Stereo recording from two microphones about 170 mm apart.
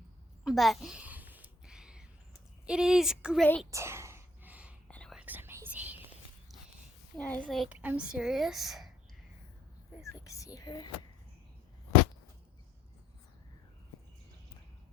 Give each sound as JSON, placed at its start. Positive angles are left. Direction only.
{"t": 0.4, "sound": "a sound", "side_deg": 0}
{"t": 2.6, "sound": "speech", "side_deg": -5}
{"t": 3.7, "sound": "whispering", "side_deg": -15}
{"t": 4.9, "sound": "whispering", "side_deg": 5}
{"t": 5.1, "sound": "whispering", "side_deg": -10}
{"t": 7.2, "sound": "speech", "side_deg": 10}
{"t": 10.1, "sound": "speech", "side_deg": 20}